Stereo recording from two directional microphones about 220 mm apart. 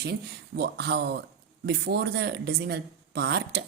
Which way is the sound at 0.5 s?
45° right (ahead or behind).